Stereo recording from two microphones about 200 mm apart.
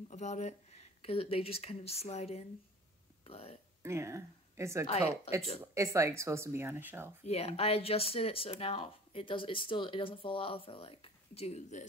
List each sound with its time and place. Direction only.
0.1 s speech: 35° left (ahead or behind)
3.8 s a woman's voice: 15° right (ahead or behind)
4.8 s speech: 30° left (ahead or behind)
5.6 s speech: 15° right (ahead or behind)
7.2 s speech: 30° left (ahead or behind)